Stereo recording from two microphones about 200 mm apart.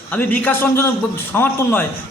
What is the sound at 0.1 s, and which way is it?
A man's voice, 10° left (ahead or behind).